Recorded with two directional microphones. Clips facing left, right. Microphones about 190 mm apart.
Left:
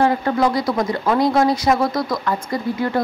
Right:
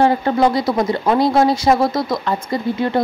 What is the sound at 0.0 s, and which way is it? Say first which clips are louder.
Speech: right 2 dB; 30° right (ahead or behind).